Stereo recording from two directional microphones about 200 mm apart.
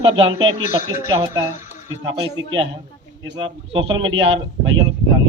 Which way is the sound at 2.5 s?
25° right (ahead or behind).